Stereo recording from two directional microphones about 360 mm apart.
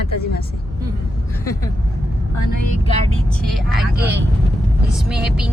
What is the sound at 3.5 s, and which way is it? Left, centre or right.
Speech, centre.